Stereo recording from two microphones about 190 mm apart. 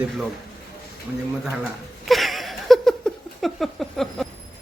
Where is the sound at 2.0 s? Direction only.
Centre (ahead or behind).